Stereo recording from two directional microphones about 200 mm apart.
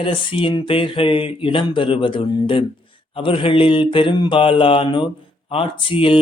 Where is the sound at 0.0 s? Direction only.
25° left (ahead or behind).